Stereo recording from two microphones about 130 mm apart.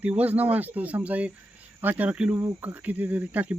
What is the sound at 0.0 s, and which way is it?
Speech, 10° right (ahead or behind).